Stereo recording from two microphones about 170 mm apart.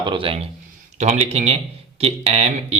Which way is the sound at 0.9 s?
40° right (ahead or behind).